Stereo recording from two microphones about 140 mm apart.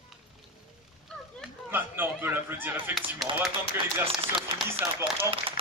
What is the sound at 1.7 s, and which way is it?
Speech, 15° right (ahead or behind).